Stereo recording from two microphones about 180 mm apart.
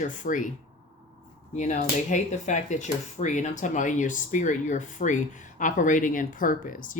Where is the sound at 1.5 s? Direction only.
40° left (ahead or behind).